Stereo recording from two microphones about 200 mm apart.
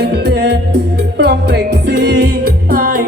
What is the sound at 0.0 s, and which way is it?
Music, 55° right (ahead or behind).